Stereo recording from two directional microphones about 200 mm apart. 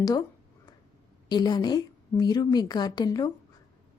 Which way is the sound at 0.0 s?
15° left (ahead or behind).